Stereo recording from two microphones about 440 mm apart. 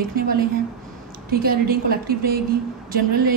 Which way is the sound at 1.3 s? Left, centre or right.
Centre.